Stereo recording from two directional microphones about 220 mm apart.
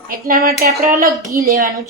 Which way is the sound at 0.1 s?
40° right (ahead or behind).